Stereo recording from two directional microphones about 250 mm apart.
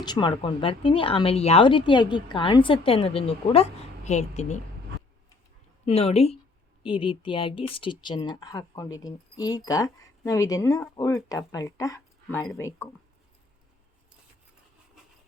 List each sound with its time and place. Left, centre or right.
0.0 s speech: centre
5.8 s speech: left